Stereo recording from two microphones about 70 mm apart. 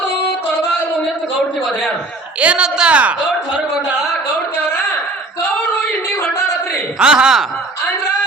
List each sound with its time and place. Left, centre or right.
2.4 s speech: centre
7.0 s speech: centre